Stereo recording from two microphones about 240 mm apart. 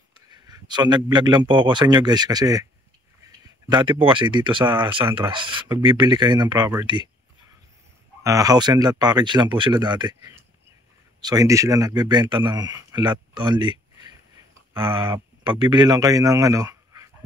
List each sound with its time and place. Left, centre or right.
0.3 s a man's voice: centre
8.2 s a man's voice: centre